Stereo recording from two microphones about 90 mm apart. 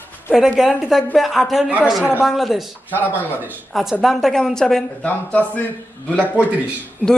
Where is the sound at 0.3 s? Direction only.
5° right (ahead or behind).